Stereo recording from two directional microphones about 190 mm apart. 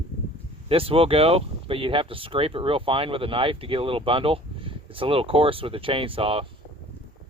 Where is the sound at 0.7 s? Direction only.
30° right (ahead or behind).